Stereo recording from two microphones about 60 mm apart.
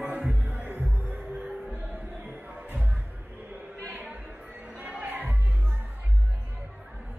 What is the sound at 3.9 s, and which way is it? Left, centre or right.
Music, right.